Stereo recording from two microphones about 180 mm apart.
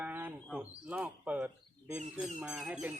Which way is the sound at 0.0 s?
10° right (ahead or behind).